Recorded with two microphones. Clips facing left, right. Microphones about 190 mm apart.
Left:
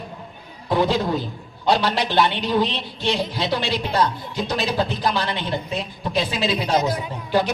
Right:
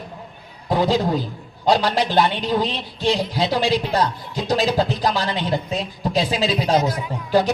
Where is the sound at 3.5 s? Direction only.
40° right (ahead or behind).